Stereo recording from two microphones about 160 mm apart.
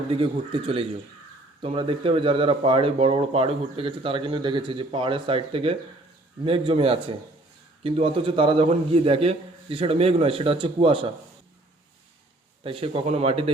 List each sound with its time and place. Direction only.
0.1 s speech: 35° right (ahead or behind)
12.6 s speech: 35° right (ahead or behind)